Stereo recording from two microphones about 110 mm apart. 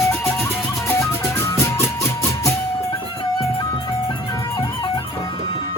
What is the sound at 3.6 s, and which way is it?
Music, 45° left (ahead or behind).